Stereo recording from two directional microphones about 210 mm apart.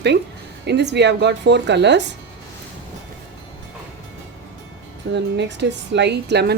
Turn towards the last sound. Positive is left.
turn(degrees=-50)  # may be behind; listen again after turning